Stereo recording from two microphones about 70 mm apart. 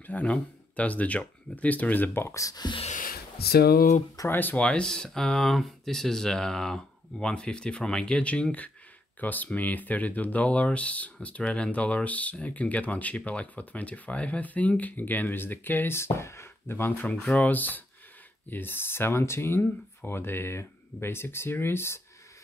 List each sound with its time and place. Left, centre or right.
0.0 s speech: centre
2.3 s speech: left
4.3 s speech: left
4.6 s speech: centre; by 17.0 s left
17.0 s speech: centre; by 19.6 s left
19.6 s speech: left
20.2 s speech: left